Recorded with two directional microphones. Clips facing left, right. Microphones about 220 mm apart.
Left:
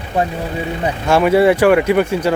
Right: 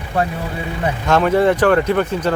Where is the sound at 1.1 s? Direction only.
10° left (ahead or behind).